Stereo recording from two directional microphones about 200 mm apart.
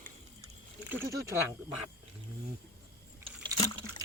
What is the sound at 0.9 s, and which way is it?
Speech, 15° right (ahead or behind).